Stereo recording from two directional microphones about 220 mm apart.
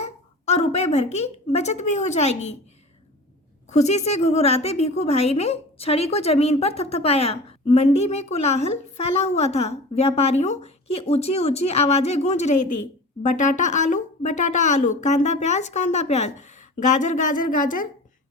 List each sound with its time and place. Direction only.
0.0 s a woman's voice: 30° left (ahead or behind)
3.7 s a woman's voice: 30° left (ahead or behind)